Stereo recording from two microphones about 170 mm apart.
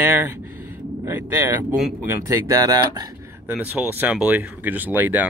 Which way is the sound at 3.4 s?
10° right (ahead or behind).